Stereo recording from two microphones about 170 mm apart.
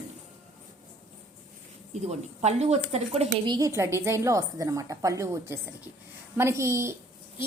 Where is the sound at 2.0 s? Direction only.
40° right (ahead or behind).